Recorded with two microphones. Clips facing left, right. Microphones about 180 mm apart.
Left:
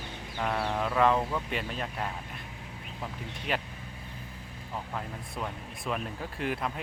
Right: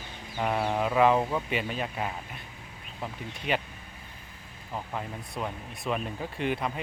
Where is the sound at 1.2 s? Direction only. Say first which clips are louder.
Right 3 dB; 20° right (ahead or behind).